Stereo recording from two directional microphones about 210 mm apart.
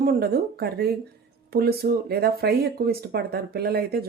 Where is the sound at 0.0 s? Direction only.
45° right (ahead or behind).